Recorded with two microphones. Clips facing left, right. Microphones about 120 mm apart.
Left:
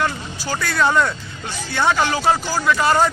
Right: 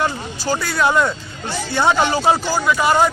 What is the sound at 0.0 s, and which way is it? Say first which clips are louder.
Speech: right 2 dB; 15° right (ahead or behind).